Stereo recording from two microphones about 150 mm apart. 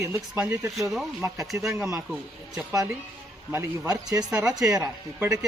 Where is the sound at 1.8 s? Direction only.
5° right (ahead or behind).